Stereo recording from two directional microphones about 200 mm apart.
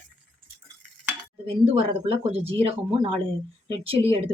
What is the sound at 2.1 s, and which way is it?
Speech, 30° right (ahead or behind).